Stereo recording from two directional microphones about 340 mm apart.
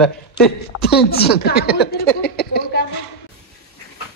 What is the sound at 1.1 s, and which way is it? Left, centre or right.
Speech, left.